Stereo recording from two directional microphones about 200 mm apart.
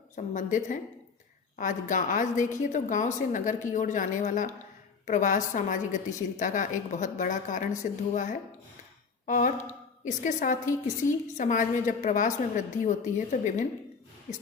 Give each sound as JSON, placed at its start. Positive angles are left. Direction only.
{"t": 0.2, "sound": "a woman's voice", "side_deg": 40}